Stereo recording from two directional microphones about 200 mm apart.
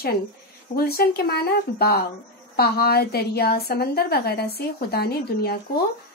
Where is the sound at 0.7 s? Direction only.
50° left (ahead or behind).